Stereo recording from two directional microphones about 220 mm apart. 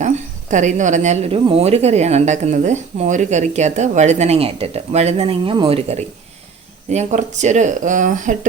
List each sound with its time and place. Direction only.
0.5 s a woman's voice: 35° right (ahead or behind)